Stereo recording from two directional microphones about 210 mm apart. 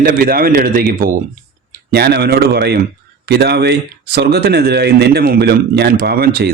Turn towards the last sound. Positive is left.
turn(degrees=-45)  # may be behind; listen again after turning